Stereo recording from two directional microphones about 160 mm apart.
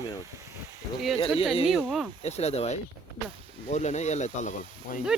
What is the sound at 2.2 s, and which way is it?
Speech, 40° left (ahead or behind).